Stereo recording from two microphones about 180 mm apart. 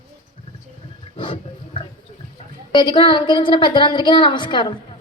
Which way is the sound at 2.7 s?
25° left (ahead or behind).